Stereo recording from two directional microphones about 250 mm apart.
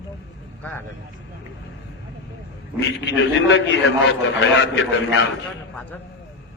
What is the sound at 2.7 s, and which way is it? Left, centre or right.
A man's voice, left.